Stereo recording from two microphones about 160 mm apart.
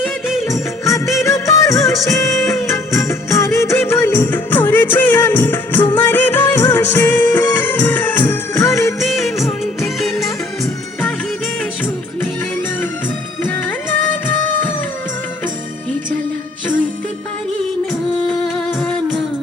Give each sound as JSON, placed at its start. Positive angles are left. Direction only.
{"t": 0.3, "sound": "music", "side_deg": 0}
{"t": 1.1, "sound": "music of bollywood", "side_deg": 20}
{"t": 2.5, "sound": "music", "side_deg": 15}
{"t": 9.0, "sound": "music", "side_deg": 0}
{"t": 14.1, "sound": "music", "side_deg": 10}
{"t": 18.3, "sound": "music", "side_deg": 5}